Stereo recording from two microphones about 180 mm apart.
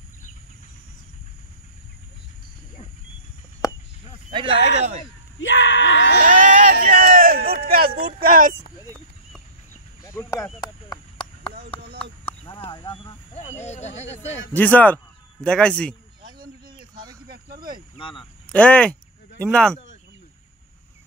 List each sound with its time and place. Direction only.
4.3 s speech: 30° right (ahead or behind)
5.4 s a sound: 90° left
6.2 s a sound: 45° right (ahead or behind)
8.2 s speech: 50° right (ahead or behind)
10.0 s a sound: 15° left (ahead or behind)
12.6 s speech: 25° left (ahead or behind)
13.7 s speech: 40° left (ahead or behind)
14.5 s speech: 10° left (ahead or behind)
17.0 s cricket: 25° right (ahead or behind)
17.9 s speech: 30° left (ahead or behind)
18.5 s speech: 5° left (ahead or behind)